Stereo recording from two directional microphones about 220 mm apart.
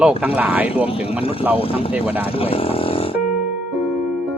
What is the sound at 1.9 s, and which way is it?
Speech, 5° right (ahead or behind).